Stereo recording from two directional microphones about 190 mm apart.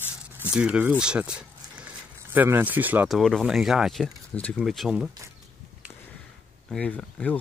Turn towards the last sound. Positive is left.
turn(degrees=5)  # may be behind; listen again after turning